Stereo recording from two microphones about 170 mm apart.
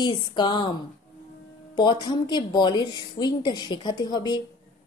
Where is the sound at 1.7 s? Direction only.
25° left (ahead or behind).